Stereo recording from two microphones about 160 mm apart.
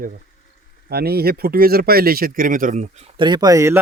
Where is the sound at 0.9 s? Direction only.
80° right; by 2.8 s 55° right (ahead or behind).